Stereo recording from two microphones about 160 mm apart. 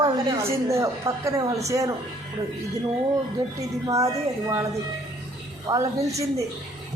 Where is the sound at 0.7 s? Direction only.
20° right (ahead or behind).